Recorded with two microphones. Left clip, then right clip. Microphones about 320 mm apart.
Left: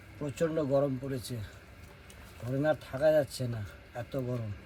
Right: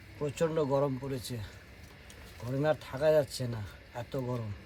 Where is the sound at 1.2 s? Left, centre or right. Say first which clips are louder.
Even; centre.